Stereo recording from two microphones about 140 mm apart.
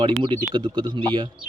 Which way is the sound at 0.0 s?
35° right (ahead or behind).